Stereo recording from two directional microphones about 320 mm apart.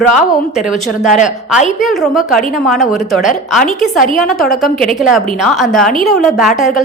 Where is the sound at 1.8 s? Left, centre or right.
Centre.